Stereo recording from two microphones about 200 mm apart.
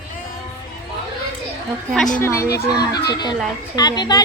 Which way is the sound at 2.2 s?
15° left (ahead or behind).